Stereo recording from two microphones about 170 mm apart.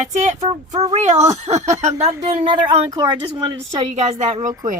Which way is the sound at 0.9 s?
40° right (ahead or behind).